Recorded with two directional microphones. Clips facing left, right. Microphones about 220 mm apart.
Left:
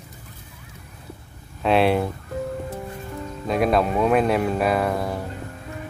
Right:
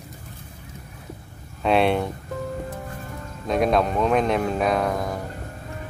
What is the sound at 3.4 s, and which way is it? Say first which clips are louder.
Speech: even; 5° left (ahead or behind).